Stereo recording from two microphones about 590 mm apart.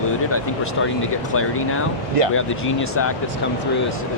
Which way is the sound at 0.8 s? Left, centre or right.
Left.